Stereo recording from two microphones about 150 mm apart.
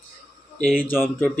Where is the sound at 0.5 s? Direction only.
10° left (ahead or behind).